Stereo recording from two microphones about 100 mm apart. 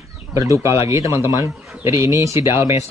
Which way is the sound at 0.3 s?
30° right (ahead or behind).